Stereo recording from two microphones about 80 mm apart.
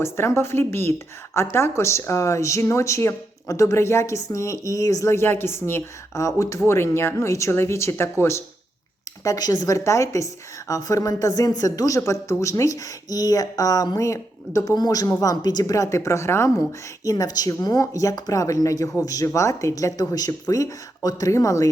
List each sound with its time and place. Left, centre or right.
0.0 s a woman's voice: left
5.1 s a woman's voice: left
9.2 s a woman's voice: left